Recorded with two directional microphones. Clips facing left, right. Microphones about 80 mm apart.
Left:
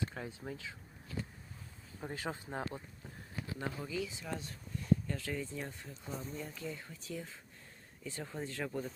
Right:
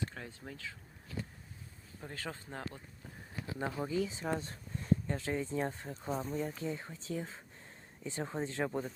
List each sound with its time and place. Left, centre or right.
0.1 s speech: centre
2.0 s speech: centre
3.4 s speech: right
5.0 s speech: right
5.6 s speech: right